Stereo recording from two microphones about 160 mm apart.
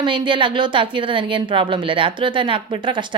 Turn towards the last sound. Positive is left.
turn(degrees=-30)  # may be behind; listen again after turning